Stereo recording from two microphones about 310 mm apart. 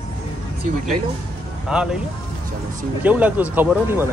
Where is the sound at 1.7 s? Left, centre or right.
Centre.